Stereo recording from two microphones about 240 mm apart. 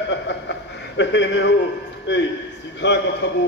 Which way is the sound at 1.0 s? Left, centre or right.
Left.